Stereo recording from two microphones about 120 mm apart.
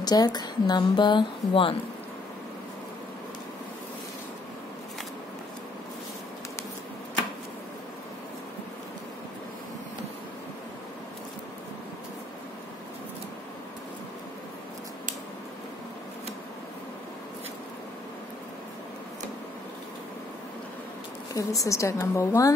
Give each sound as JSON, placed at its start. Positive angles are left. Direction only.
{"t": 0.0, "sound": "speech", "side_deg": 35}
{"t": 21.4, "sound": "speech", "side_deg": 30}